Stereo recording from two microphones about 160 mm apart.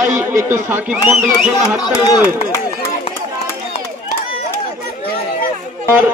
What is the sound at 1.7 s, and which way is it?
Speech, 20° left (ahead or behind).